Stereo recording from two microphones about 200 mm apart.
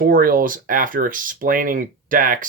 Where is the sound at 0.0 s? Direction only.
45° right (ahead or behind).